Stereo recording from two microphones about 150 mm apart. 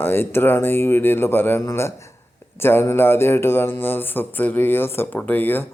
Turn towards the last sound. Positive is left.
turn(degrees=15)  # may be behind; listen again after turning